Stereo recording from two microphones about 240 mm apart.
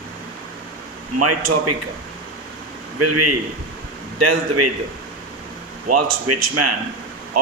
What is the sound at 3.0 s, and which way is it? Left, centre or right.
A man's voice, right.